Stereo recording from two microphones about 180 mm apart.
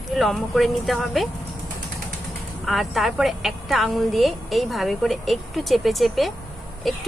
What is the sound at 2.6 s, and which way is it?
A woman's voice, centre (ahead or behind).